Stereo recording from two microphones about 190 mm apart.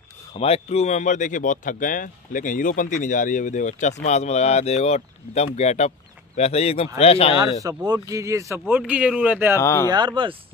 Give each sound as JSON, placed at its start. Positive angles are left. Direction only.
{"t": 0.3, "sound": "speech", "side_deg": 35}
{"t": 7.6, "sound": "speech", "side_deg": -20}
{"t": 9.6, "sound": "speech", "side_deg": 15}
{"t": 9.8, "sound": "speech", "side_deg": -25}